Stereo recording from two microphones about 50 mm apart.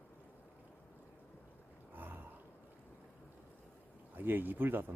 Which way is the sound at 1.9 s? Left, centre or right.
Right.